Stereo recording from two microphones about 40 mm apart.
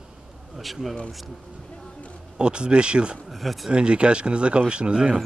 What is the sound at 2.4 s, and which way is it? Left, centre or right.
Speech, right.